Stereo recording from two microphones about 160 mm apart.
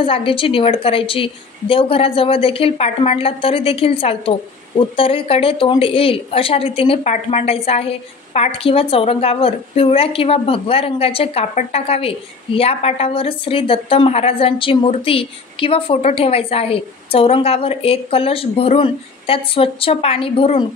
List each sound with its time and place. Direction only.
0.0 s a woman's voice: 35° left (ahead or behind)